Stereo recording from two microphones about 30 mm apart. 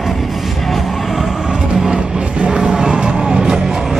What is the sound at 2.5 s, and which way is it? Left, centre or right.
Music, right.